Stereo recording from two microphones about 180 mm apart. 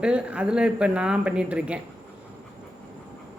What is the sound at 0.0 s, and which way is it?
Speech, 5° right (ahead or behind).